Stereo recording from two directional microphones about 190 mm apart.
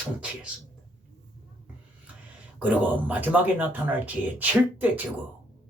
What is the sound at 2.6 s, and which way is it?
Speech, 10° right (ahead or behind).